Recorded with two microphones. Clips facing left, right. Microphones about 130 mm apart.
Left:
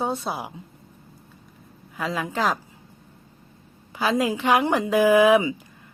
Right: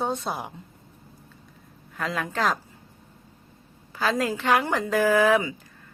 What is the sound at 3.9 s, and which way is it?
Speech, 10° left (ahead or behind).